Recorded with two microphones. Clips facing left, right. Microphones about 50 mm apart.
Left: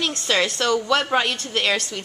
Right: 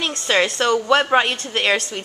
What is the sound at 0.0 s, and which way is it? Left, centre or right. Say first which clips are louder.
A woman's voice: right 3 dB; centre.